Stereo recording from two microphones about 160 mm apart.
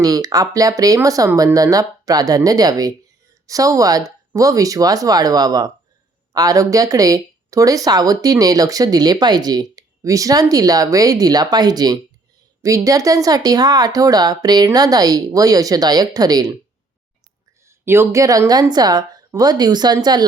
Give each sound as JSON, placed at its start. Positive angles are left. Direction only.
{"t": 0.0, "sound": "speech", "side_deg": -20}
{"t": 17.7, "sound": "speech", "side_deg": -15}